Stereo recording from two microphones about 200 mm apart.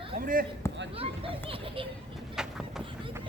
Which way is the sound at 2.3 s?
5° right (ahead or behind).